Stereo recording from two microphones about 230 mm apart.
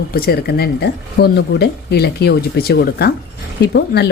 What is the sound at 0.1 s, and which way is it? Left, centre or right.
Speech, left.